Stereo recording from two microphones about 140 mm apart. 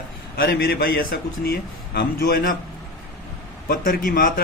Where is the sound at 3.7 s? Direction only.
80° left.